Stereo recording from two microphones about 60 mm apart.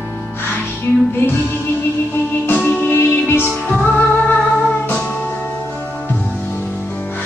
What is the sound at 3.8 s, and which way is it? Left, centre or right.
Music, left.